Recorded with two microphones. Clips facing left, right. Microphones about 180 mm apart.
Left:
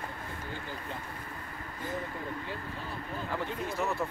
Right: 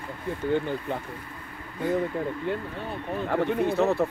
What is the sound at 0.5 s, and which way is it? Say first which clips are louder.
Speech: right 15 dB; 60° right (ahead or behind).